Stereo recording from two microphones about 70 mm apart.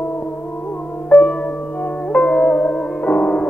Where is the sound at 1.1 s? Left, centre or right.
Left.